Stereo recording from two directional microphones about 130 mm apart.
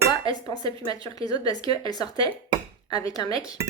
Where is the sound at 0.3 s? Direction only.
30° left (ahead or behind).